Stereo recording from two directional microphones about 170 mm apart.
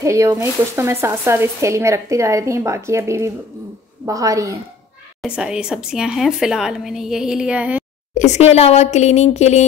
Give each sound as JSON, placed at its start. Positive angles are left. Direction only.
{"t": 0.0, "sound": "a woman's voice", "side_deg": -15}
{"t": 5.2, "sound": "a woman's voice", "side_deg": -5}
{"t": 8.1, "sound": "speech", "side_deg": 45}